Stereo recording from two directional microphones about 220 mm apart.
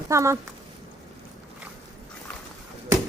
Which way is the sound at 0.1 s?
15° right (ahead or behind).